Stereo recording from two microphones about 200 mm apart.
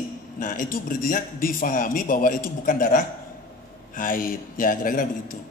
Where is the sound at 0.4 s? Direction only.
45° left (ahead or behind).